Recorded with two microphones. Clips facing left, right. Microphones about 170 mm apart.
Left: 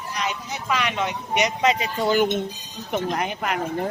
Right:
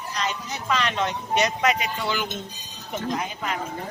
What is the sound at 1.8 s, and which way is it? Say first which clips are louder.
Speech: left 7 dB; 40° left (ahead or behind).